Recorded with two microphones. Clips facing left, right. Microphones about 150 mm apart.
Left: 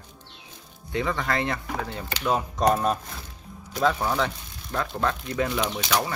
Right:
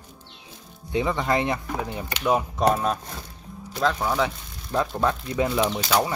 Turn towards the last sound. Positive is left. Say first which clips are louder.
# right 3 dB
turn(degrees=0)  # may be behind; listen again after turning